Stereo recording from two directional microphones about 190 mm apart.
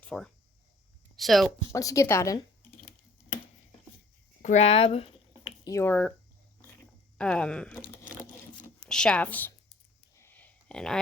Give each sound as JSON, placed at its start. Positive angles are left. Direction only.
{"t": 0.0, "sound": "speech", "side_deg": 5}
{"t": 1.7, "sound": "a woman's voice", "side_deg": 15}
{"t": 4.4, "sound": "a sound", "side_deg": 35}
{"t": 5.6, "sound": "a woman's voice", "side_deg": 15}
{"t": 7.2, "sound": "speech", "side_deg": 5}
{"t": 8.9, "sound": "a woman's voice", "side_deg": 5}
{"t": 10.2, "sound": "a sound", "side_deg": 10}